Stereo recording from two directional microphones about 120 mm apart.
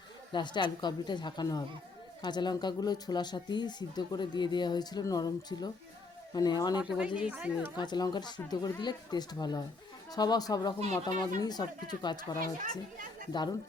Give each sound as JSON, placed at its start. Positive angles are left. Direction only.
{"t": 0.3, "sound": "speech", "side_deg": 40}
{"t": 6.7, "sound": "speech", "side_deg": -10}
{"t": 7.8, "sound": "speech", "side_deg": 35}